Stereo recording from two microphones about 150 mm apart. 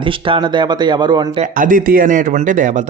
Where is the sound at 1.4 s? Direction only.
60° right (ahead or behind).